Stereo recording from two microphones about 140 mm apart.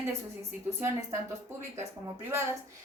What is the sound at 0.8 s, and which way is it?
Speech, 20° right (ahead or behind).